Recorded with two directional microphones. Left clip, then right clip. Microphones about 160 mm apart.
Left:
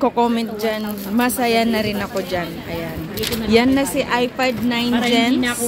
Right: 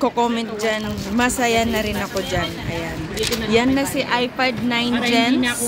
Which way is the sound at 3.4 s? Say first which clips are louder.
Left 3 dB; 10° left (ahead or behind).